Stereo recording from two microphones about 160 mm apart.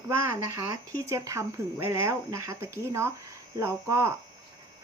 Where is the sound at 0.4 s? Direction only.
20° right (ahead or behind).